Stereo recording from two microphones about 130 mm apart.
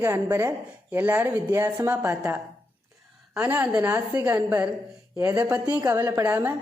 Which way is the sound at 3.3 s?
15° right (ahead or behind).